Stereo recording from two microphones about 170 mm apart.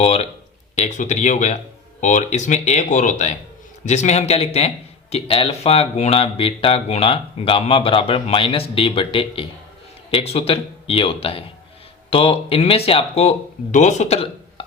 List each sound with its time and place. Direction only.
0.0 s speech: 35° left (ahead or behind)